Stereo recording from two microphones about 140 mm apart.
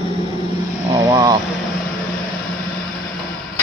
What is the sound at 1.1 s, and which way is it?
Speech, 25° right (ahead or behind).